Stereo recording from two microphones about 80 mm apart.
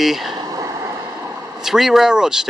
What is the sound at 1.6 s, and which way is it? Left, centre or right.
Speech, centre.